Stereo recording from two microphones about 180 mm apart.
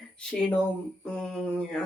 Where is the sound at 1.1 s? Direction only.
5° left (ahead or behind).